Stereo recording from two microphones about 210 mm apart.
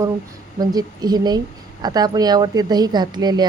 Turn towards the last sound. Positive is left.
turn(degrees=-20)  # may be behind; listen again after turning